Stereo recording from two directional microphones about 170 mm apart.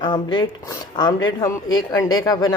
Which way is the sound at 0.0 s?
25° left (ahead or behind).